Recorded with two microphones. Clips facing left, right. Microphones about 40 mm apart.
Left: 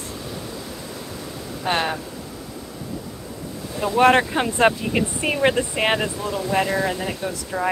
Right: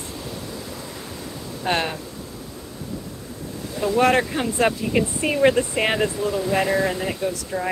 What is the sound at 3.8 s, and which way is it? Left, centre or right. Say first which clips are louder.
Speech: left 2 dB; left.